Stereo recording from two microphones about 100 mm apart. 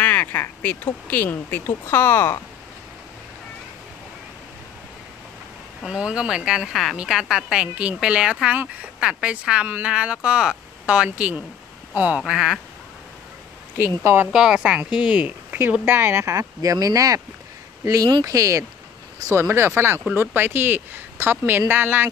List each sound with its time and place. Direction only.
0.0 s speech: 15° left (ahead or behind)
5.8 s speech: 10° right (ahead or behind)
13.7 s speech: 25° right (ahead or behind)
14.3 s speech: 10° right (ahead or behind)